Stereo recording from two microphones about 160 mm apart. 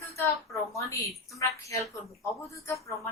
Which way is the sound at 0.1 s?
20° left (ahead or behind).